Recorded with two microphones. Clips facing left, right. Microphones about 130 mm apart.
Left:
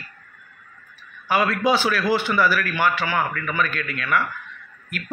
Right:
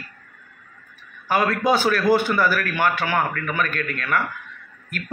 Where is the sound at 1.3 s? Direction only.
45° right (ahead or behind).